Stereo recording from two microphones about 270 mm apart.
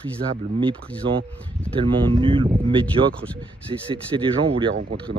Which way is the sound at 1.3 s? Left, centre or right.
Centre.